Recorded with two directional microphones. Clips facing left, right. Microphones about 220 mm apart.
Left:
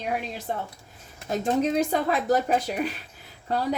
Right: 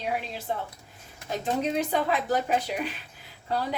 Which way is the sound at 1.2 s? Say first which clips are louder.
Left 4 dB; 45° left (ahead or behind).